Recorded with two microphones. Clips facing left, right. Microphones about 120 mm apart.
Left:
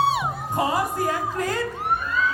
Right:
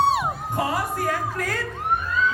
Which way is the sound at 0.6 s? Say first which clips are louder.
Left 3 dB; 20° left (ahead or behind).